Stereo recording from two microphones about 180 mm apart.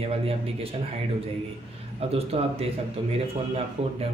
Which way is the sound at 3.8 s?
30° right (ahead or behind).